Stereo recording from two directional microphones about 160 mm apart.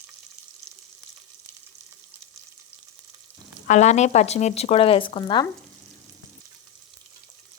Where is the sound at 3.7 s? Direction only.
45° left (ahead or behind); by 5.4 s 30° left (ahead or behind).